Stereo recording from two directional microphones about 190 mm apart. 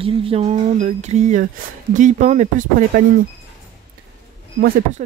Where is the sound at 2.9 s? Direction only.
50° right (ahead or behind).